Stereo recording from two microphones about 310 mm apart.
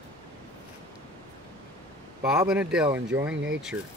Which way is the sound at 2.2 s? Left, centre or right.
Centre.